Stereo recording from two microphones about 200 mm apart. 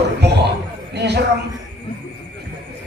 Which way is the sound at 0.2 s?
55° right (ahead or behind).